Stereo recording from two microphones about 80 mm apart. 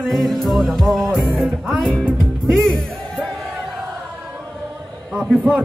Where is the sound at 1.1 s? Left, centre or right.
Centre.